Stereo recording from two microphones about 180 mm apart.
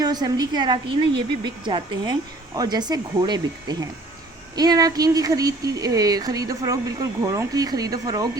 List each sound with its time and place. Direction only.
0.0 s speech: 20° right (ahead or behind)